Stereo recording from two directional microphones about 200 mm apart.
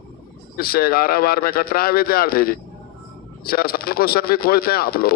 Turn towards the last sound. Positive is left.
turn(degrees=50)  # may be behind; listen again after turning